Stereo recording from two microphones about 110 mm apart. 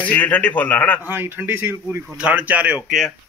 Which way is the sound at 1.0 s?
15° right (ahead or behind).